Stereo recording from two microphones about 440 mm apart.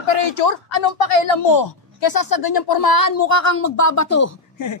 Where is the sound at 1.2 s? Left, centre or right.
Left.